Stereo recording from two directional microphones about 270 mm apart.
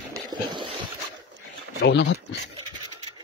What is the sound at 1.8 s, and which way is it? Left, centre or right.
Speech, left.